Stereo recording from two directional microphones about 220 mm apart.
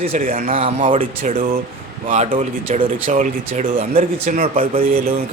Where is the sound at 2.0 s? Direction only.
30° right (ahead or behind).